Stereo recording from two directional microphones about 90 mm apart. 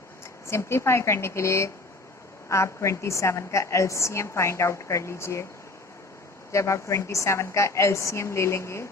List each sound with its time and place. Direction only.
0.4 s a woman's voice: 30° left (ahead or behind)
6.5 s a woman's voice: 35° left (ahead or behind)